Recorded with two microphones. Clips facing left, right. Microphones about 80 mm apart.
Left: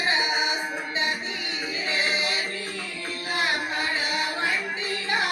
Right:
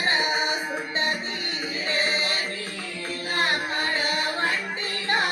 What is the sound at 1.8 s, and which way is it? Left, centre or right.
Music, right.